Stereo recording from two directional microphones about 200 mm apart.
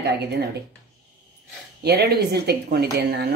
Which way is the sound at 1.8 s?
55° right (ahead or behind).